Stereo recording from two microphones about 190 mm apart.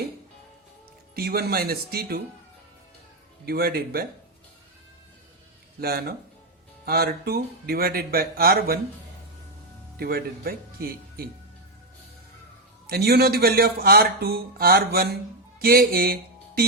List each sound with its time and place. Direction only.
1.1 s speech: 55° right (ahead or behind)
3.4 s speech: 55° right (ahead or behind)
5.8 s speech: 55° right (ahead or behind)
10.0 s speech: 50° right (ahead or behind)
12.9 s speech: 55° right (ahead or behind)